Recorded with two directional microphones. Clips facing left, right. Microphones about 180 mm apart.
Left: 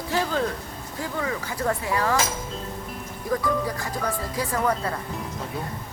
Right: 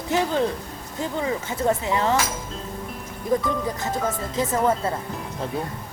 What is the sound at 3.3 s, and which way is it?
Speech, 20° right (ahead or behind).